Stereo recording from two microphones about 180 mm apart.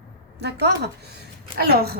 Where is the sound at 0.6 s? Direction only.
65° right (ahead or behind).